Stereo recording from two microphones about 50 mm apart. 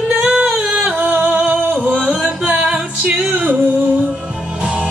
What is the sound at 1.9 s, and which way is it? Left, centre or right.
Music, centre.